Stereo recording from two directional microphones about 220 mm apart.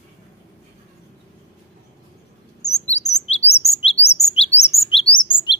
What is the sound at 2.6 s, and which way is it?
Chirp, 30° left (ahead or behind).